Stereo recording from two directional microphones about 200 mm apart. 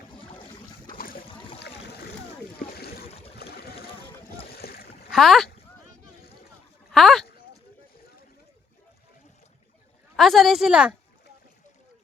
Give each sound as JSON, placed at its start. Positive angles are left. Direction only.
{"t": 0.9, "sound": "boat", "side_deg": 45}
{"t": 3.3, "sound": "boat", "side_deg": 55}
{"t": 5.1, "sound": "a woman's voice", "side_deg": 0}
{"t": 6.9, "sound": "a sound", "side_deg": 0}
{"t": 10.2, "sound": "a woman's voice", "side_deg": 0}